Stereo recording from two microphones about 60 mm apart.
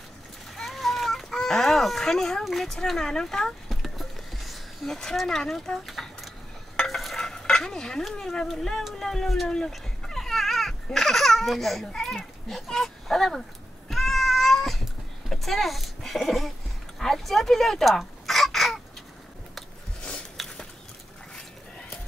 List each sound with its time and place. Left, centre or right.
0.6 s chicken: centre
2.4 s a sound: centre
5.1 s speech: centre
5.9 s a sound: centre
6.8 s stir: centre
8.1 s speech: centre
9.7 s babbling: centre
12.4 s speech: centre
13.8 s cat: centre
15.2 s a sound: centre
17.0 s speech: centre
20.3 s a sound: centre